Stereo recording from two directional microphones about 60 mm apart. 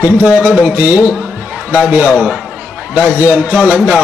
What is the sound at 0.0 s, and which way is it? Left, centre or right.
A man's voice, right.